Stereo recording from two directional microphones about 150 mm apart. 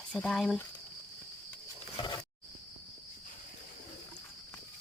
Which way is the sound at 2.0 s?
30° left (ahead or behind).